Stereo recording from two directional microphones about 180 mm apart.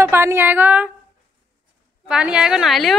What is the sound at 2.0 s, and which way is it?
Speech, 5° right (ahead or behind).